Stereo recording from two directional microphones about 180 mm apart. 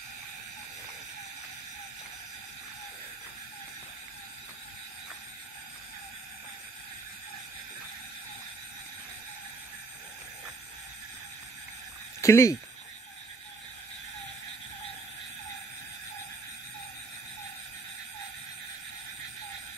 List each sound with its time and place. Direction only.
12.2 s speech: 15° left (ahead or behind)